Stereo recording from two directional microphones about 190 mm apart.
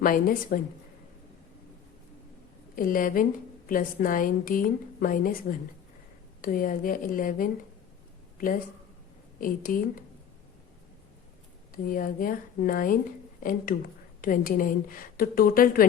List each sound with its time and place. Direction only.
0.0 s a woman's voice: 45° left (ahead or behind)
2.7 s a woman's voice: 45° left (ahead or behind)
11.7 s a woman's voice: 45° left (ahead or behind)